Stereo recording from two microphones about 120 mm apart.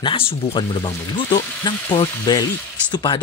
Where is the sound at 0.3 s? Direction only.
50° left (ahead or behind).